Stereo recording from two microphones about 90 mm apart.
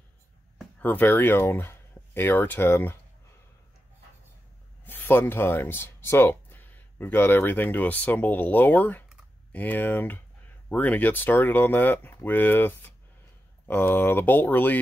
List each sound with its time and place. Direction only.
0.7 s speech: 20° left (ahead or behind)
4.8 s speech: 20° left (ahead or behind)